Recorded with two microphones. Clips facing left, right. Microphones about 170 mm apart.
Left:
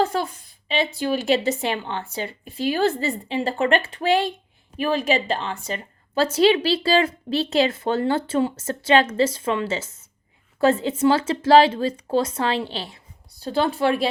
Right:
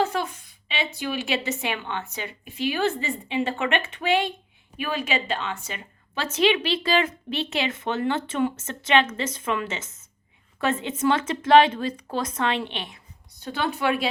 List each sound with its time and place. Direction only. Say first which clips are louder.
0.0 s a woman's voice: left 3 dB; 35° left (ahead or behind)